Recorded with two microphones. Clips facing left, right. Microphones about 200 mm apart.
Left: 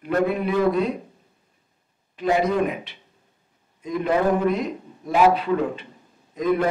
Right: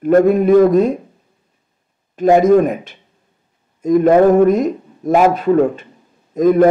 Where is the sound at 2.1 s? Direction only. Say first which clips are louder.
Right 11 dB; 45° right (ahead or behind).